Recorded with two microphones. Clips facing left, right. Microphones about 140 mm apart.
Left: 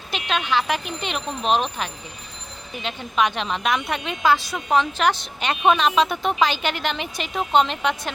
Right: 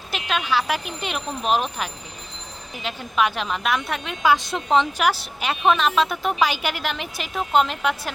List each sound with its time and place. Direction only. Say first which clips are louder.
0.1 s a woman's voice: even; 5° right (ahead or behind)
4.3 s speech: right 1 dB; 20° right (ahead or behind)
5.0 s a woman's voice: left 1 dB; 5° right (ahead or behind)